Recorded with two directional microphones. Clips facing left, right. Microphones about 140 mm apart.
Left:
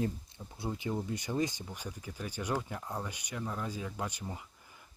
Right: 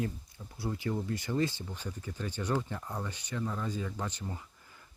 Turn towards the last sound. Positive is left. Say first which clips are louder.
# even
turn(degrees=10)  # may be behind; listen again after turning